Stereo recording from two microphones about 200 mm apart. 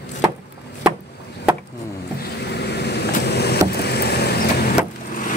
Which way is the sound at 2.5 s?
55° left (ahead or behind).